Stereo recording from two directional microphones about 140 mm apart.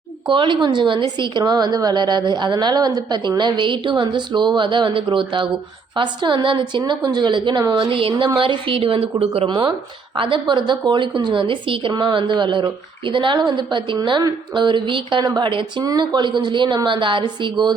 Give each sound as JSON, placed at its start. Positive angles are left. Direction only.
{"t": 0.3, "sound": "a woman's voice", "side_deg": -35}